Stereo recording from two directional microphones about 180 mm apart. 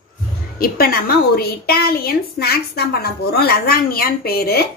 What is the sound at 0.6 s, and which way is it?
A woman's voice, 55° left (ahead or behind).